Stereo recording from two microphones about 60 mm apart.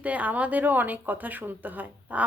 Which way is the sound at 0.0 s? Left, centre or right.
Right.